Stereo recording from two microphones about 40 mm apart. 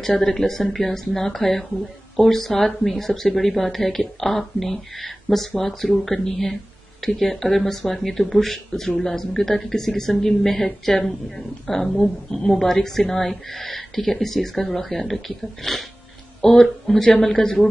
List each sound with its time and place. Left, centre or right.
0.2 s speech: centre